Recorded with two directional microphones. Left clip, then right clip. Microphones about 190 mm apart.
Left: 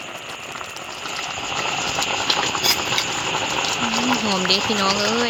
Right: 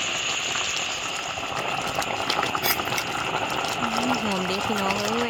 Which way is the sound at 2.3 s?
15° right (ahead or behind).